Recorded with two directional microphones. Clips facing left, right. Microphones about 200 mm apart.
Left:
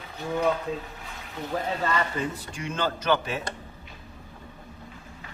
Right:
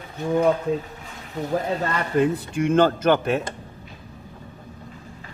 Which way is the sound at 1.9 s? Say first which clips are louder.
Right 7 dB; 55° right (ahead or behind).